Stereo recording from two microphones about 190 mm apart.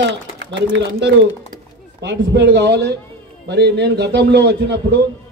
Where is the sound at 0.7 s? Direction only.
70° right (ahead or behind).